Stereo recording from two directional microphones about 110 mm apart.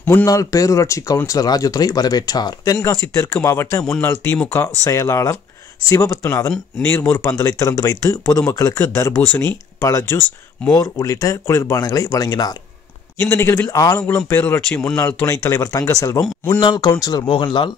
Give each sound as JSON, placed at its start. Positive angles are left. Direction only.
{"t": 0.0, "sound": "a man's voice", "side_deg": 20}
{"t": 0.3, "sound": "speech", "side_deg": 30}
{"t": 4.8, "sound": "speech", "side_deg": 30}
{"t": 13.2, "sound": "speech", "side_deg": 25}
{"t": 14.7, "sound": "speech", "side_deg": 5}
{"t": 15.0, "sound": "speech", "side_deg": 20}
{"t": 16.5, "sound": "speech", "side_deg": 45}